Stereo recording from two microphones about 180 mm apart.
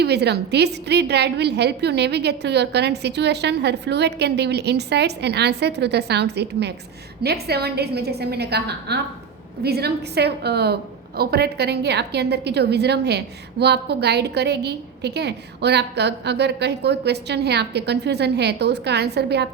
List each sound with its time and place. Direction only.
0.0 s a woman's voice: 65° right (ahead or behind)